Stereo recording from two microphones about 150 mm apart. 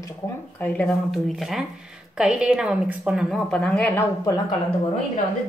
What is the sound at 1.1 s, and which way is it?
Speech, centre (ahead or behind).